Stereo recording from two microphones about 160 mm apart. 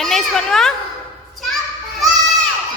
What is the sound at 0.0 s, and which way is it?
Speech, centre (ahead or behind).